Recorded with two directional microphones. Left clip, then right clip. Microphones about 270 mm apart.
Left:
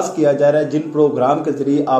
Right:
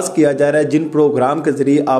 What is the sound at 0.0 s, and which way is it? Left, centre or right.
Speech, right.